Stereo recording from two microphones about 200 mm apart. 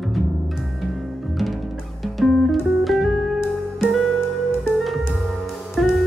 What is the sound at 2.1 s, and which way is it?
Music, centre (ahead or behind).